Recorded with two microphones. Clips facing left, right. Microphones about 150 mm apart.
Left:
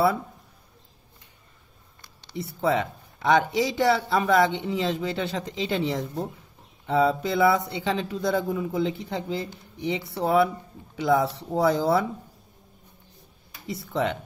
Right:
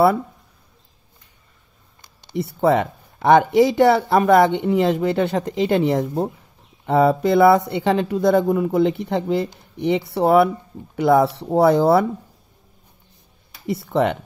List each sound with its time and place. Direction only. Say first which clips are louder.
2.3 s speech: right 7 dB; 60° right (ahead or behind)
13.7 s speech: right 7 dB; 60° right (ahead or behind)